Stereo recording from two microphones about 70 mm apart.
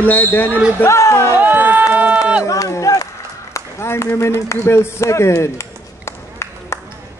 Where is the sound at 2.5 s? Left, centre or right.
Left.